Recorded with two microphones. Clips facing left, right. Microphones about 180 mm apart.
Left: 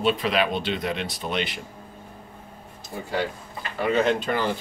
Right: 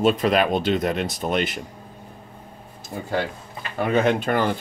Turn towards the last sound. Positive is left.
turn(degrees=-55)  # may be behind; listen again after turning